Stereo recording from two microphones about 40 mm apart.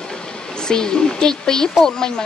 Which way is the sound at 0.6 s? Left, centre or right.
Centre.